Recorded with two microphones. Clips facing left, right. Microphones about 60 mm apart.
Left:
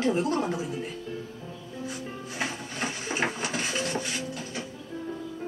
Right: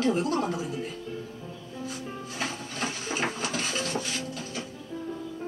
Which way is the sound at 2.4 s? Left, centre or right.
Left.